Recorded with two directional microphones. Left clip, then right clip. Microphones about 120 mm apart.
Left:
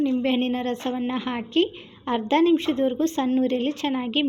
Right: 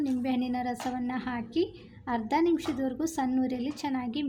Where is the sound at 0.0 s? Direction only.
15° left (ahead or behind).